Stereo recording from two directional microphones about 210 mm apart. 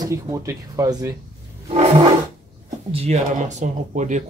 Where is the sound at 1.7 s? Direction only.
30° right (ahead or behind).